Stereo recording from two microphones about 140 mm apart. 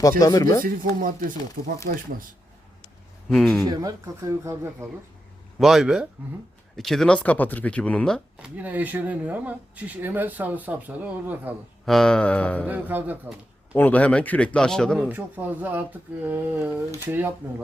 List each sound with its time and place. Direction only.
0.2 s speech: 25° left (ahead or behind)
0.6 s speech: 90° right
3.2 s speech: 5° left (ahead or behind)
3.7 s speech: 25° right (ahead or behind)
5.5 s speech: centre (ahead or behind)
8.4 s speech: 10° right (ahead or behind)
11.9 s speech: 5° left (ahead or behind)
12.6 s speech: 10° right (ahead or behind)
13.7 s speech: 10° left (ahead or behind)
15.1 s speech: 15° right (ahead or behind)